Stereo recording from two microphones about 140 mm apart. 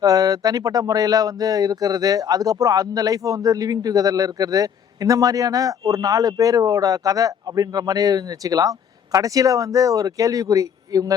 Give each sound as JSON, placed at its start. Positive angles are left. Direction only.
{"t": 0.0, "sound": "speech", "side_deg": -25}